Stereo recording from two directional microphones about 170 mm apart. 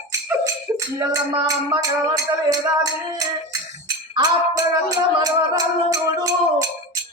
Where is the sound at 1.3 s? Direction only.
20° right (ahead or behind).